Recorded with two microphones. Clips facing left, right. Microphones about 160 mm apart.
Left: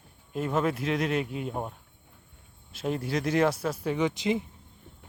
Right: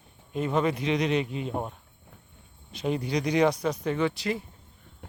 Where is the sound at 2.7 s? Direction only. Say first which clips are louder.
Right 2 dB; centre (ahead or behind); by 4.4 s 20° left (ahead or behind).